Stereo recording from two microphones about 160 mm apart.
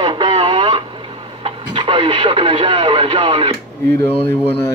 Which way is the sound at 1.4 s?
30° right (ahead or behind).